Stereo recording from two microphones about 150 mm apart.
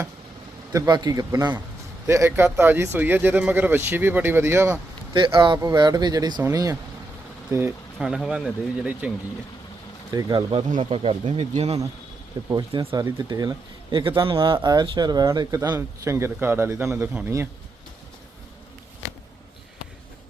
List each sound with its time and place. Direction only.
0.7 s speech: 25° right (ahead or behind)
5.1 s speech: 35° right (ahead or behind)
7.9 s speech: centre (ahead or behind)
10.1 s speech: 25° right (ahead or behind); by 11.8 s 45° right (ahead or behind)
12.4 s speech: 25° right (ahead or behind)
13.1 s speech: 25° right (ahead or behind)